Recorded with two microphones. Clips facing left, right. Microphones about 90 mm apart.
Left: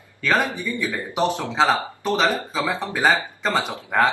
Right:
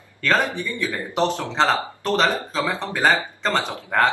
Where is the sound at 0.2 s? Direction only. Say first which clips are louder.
Even; 10° left (ahead or behind).